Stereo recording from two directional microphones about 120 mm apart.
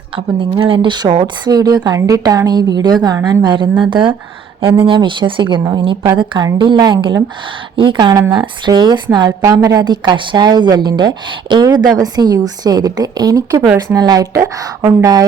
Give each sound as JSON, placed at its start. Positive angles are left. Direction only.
{"t": 0.2, "sound": "a woman's voice", "side_deg": -45}